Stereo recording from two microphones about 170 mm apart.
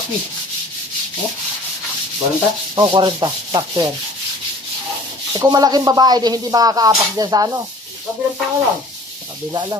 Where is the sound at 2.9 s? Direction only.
30° right (ahead or behind).